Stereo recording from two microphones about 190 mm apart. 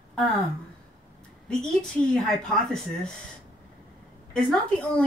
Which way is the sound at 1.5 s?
5° left (ahead or behind).